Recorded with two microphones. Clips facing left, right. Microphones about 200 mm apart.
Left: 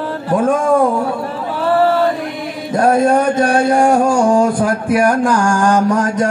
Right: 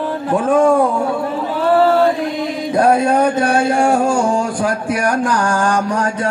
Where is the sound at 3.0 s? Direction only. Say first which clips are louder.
Left 2 dB; 50° left (ahead or behind).